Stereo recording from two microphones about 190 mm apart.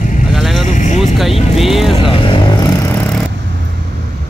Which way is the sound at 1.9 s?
25° left (ahead or behind).